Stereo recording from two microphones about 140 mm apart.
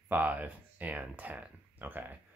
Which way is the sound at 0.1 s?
10° right (ahead or behind).